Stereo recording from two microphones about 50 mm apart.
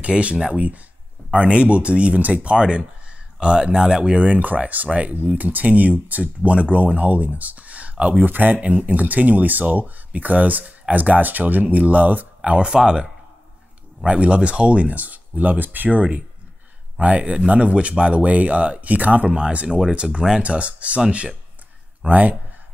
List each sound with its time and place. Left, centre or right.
0.0 s speech: right
12.4 s speech: centre
19.3 s speech: right
22.0 s speech: right